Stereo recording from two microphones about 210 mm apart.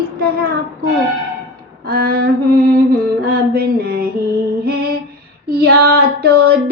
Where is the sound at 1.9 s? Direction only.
45° right (ahead or behind).